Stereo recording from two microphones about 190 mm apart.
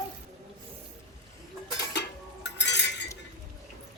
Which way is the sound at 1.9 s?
65° left (ahead or behind).